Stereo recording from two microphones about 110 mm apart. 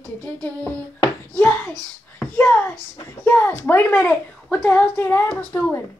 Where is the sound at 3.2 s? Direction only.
10° left (ahead or behind).